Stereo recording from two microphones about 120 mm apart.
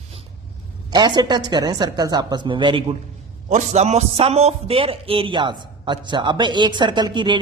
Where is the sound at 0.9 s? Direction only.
35° right (ahead or behind).